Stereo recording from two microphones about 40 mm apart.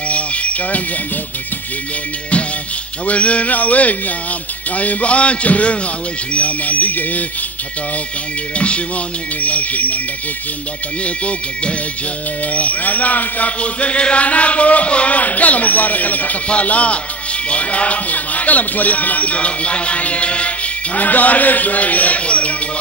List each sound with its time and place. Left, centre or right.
0.1 s a sound: left
3.1 s speech: left
8.5 s speech: left
11.1 s speech: left